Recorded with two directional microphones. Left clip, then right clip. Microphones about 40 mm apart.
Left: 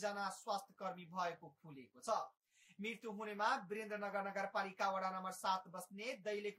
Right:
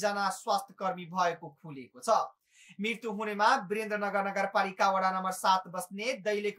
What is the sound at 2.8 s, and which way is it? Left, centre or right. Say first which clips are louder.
Speech: right 12 dB; left.